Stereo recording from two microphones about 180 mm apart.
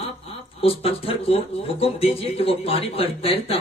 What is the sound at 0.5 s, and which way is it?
Speech, 30° left (ahead or behind).